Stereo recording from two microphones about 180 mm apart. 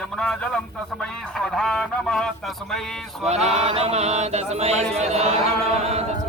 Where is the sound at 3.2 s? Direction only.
40° right (ahead or behind).